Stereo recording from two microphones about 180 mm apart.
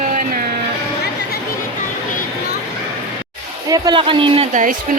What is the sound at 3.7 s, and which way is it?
Speech, 20° right (ahead or behind).